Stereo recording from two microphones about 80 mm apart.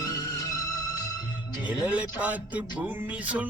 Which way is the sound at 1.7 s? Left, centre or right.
Centre.